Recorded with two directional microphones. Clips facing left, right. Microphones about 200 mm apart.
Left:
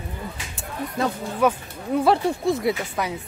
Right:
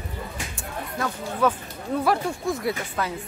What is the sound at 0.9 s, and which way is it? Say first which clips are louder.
Speech: left 4 dB; 20° left (ahead or behind).